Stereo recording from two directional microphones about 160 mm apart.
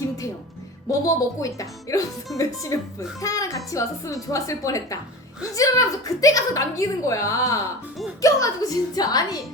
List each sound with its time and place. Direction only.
0.9 s a woman's voice: 20° left (ahead or behind)